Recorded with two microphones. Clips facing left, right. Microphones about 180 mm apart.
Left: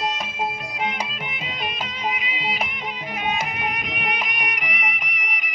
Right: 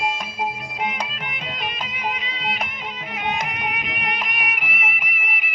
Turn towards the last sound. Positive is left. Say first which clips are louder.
# right 1 dB
turn(degrees=-5)  # may be behind; listen again after turning